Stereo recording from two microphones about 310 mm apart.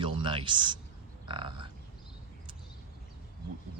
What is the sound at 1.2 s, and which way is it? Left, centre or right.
Livestock, centre.